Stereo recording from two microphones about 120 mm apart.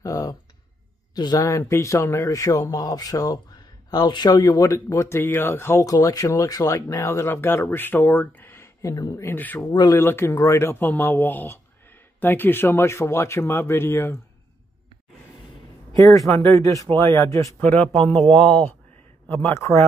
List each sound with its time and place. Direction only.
0.0 s a sound: 30° left (ahead or behind)
1.1 s speech: 35° left (ahead or behind); by 9.6 s 15° left (ahead or behind)
9.6 s speech: 35° left (ahead or behind)
10.0 s speech: 20° left (ahead or behind)
16.3 s speech: 20° left (ahead or behind)
17.9 s speech: 5° left (ahead or behind)
19.2 s speech: 15° left (ahead or behind)